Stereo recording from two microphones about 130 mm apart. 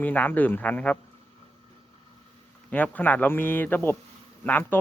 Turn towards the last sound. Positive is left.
turn(degrees=15)  # may be behind; listen again after turning